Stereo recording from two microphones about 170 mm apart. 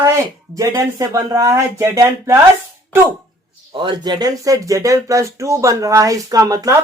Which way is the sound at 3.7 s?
30° right (ahead or behind).